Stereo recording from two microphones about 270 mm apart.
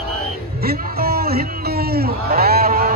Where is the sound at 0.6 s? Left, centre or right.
Right.